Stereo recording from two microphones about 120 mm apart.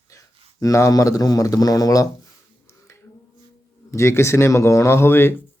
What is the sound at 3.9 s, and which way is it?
Speech, 25° left (ahead or behind).